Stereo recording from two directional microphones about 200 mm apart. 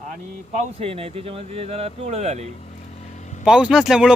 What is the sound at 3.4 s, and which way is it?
Speech, 5° right (ahead or behind).